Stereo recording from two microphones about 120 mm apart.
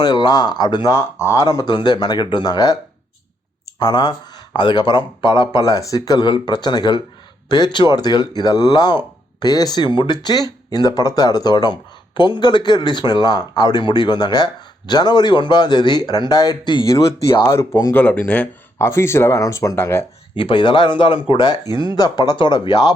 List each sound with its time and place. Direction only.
0.0 s speech: 35° left (ahead or behind)
0.9 s speech: 25° left (ahead or behind)
3.8 s speech: 35° left (ahead or behind)
17.4 s speech: 20° left (ahead or behind)
18.8 s speech: 20° left (ahead or behind)
20.3 s speech: 45° left (ahead or behind)